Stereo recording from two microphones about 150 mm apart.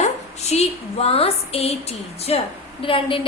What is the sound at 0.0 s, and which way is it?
A woman's voice, 45° left (ahead or behind).